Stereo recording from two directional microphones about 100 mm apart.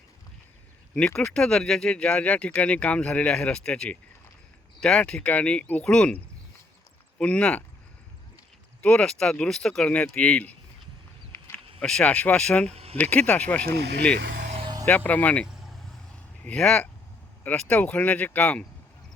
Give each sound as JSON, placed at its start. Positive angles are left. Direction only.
{"t": 0.9, "sound": "speech", "side_deg": 10}
{"t": 8.8, "sound": "speech", "side_deg": 10}
{"t": 11.8, "sound": "speech", "side_deg": 10}
{"t": 12.7, "sound": "a sound", "side_deg": -85}
{"t": 13.0, "sound": "speech", "side_deg": 15}
{"t": 14.5, "sound": "a sound", "side_deg": -55}
{"t": 14.8, "sound": "speech", "side_deg": 15}
{"t": 15.4, "sound": "vehicle", "side_deg": -5}
{"t": 16.1, "sound": "a sound", "side_deg": 10}
{"t": 17.4, "sound": "speech", "side_deg": 15}